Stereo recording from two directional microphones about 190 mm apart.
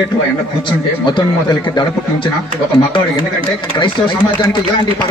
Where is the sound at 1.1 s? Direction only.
25° left (ahead or behind).